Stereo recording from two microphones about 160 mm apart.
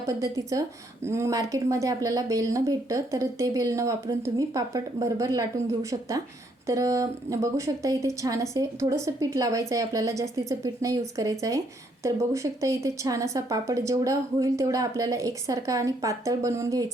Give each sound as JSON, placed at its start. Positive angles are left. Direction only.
{"t": 0.0, "sound": "a woman's voice", "side_deg": -20}